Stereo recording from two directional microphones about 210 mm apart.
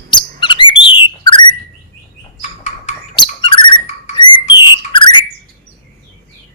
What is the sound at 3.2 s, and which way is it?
Bird, 20° left (ahead or behind).